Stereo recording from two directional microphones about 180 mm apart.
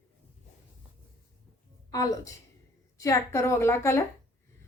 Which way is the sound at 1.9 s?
20° left (ahead or behind).